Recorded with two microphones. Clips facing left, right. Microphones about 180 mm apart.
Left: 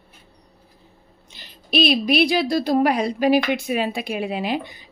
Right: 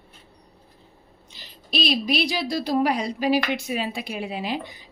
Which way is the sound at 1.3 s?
60° left (ahead or behind).